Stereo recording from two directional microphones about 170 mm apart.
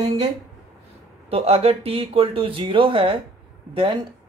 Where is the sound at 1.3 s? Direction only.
35° right (ahead or behind).